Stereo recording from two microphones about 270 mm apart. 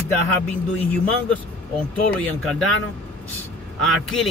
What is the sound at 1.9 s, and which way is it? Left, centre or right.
Speech, centre.